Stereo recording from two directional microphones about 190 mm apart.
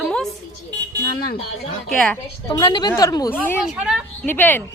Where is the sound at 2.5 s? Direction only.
20° left (ahead or behind).